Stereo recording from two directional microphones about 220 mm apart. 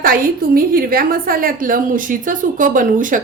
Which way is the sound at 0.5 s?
40° right (ahead or behind).